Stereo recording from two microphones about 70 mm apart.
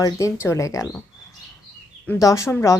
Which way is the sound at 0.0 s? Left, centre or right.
Left.